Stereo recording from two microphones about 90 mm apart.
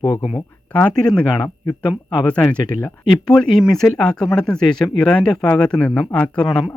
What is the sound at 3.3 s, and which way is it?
Speech, 5° left (ahead or behind).